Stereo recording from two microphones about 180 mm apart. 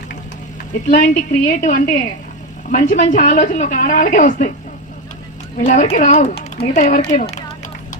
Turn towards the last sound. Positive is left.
turn(degrees=40)  # may be behind; listen again after turning